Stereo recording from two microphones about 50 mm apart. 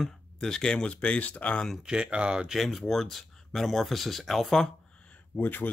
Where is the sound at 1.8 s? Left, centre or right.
Centre.